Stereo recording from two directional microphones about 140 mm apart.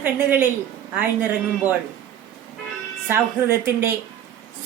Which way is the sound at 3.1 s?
15° right (ahead or behind).